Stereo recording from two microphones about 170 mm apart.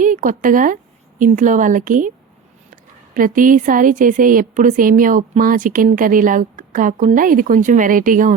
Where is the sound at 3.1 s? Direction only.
50° right (ahead or behind).